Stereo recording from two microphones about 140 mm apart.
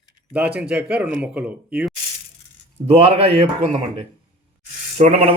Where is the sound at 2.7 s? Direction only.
40° right (ahead or behind).